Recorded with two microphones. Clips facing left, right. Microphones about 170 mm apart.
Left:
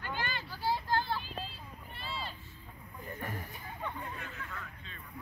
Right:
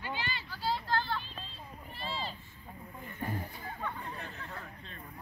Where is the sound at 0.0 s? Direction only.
50° left (ahead or behind).